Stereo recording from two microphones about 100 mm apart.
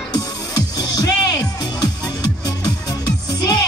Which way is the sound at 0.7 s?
40° left (ahead or behind).